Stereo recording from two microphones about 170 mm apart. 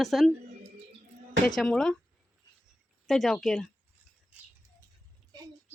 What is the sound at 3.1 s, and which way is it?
Speech, centre (ahead or behind).